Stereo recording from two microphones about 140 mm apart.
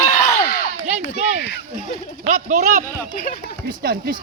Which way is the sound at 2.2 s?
60° right (ahead or behind).